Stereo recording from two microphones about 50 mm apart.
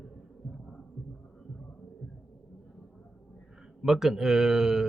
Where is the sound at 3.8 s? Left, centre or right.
Centre.